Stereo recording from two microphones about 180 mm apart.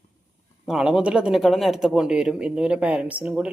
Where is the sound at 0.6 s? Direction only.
5° right (ahead or behind).